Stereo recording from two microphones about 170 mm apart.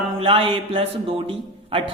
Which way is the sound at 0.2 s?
30° right (ahead or behind).